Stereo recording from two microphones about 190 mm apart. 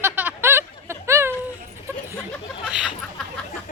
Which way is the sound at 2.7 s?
5° right (ahead or behind).